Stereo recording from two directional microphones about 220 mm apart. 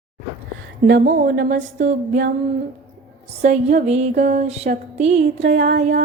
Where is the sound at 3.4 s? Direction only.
35° right (ahead or behind).